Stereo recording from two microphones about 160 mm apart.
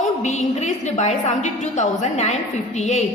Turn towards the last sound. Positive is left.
turn(degrees=45)  # may be behind; listen again after turning